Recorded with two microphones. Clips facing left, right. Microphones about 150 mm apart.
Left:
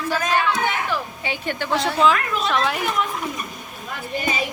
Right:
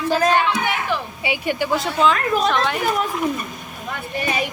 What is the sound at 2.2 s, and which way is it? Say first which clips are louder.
Speech: right 5 dB; 40° right (ahead or behind).